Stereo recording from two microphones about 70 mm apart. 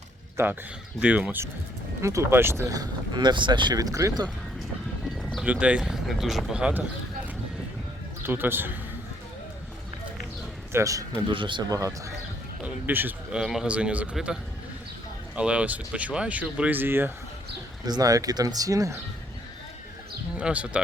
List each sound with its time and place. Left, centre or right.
0.4 s a man's voice: right
0.9 s speech: centre
2.0 s a man's voice: right
2.6 s speech: right
5.5 s speech: centre
8.2 s a man's voice: right
10.7 s speech: right
11.6 s speech: right
12.6 s speech: right
13.3 s speech: centre
13.7 s speech: centre
15.4 s speech: centre
17.8 s speech: right
20.3 s speech: centre